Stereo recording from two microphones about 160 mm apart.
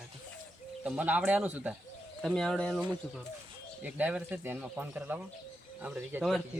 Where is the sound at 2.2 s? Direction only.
5° left (ahead or behind).